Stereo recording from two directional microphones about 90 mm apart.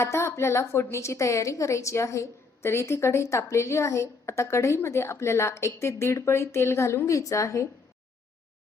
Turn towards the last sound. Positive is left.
turn(degrees=35)  # may be behind; listen again after turning